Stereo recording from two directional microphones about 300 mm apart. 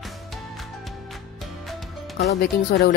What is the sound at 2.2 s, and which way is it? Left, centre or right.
Speech, left.